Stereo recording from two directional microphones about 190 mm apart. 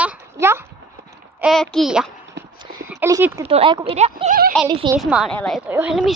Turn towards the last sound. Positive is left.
turn(degrees=-5)  # may be behind; listen again after turning